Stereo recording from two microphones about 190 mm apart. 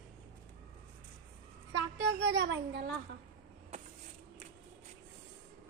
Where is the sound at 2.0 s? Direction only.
65° right (ahead or behind).